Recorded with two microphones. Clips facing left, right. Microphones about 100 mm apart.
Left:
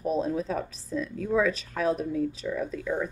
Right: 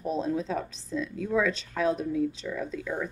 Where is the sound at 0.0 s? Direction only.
5° left (ahead or behind).